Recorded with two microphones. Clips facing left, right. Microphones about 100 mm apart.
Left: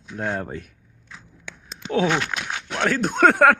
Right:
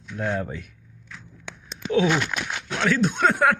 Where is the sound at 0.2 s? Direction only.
40° left (ahead or behind).